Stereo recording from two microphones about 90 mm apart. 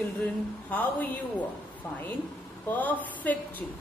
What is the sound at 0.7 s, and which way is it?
Speech, 20° left (ahead or behind).